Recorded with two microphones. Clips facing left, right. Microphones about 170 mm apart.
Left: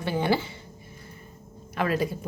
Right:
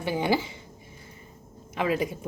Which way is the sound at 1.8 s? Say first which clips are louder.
Even; 20° right (ahead or behind).